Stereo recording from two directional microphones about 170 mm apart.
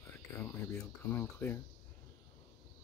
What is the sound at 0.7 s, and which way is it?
Speech, 15° left (ahead or behind).